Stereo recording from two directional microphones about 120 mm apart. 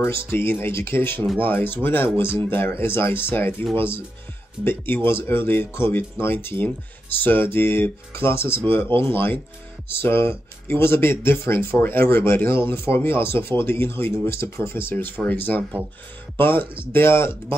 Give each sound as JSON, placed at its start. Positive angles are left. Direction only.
{"t": 0.0, "sound": "speech", "side_deg": 20}